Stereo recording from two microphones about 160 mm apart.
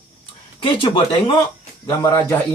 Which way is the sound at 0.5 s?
30° left (ahead or behind).